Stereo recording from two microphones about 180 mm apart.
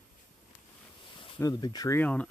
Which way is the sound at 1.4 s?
20° left (ahead or behind).